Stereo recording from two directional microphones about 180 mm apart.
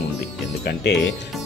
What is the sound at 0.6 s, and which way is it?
Speech, 70° left (ahead or behind).